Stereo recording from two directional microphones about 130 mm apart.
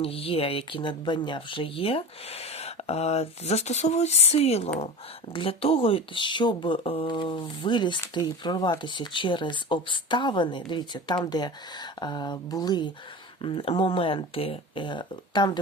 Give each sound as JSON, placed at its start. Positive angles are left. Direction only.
{"t": 0.0, "sound": "speech", "side_deg": 45}
{"t": 13.4, "sound": "speech", "side_deg": 45}